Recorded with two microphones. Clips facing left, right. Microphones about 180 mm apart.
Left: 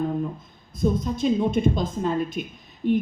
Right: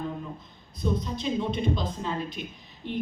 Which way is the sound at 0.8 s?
45° left (ahead or behind).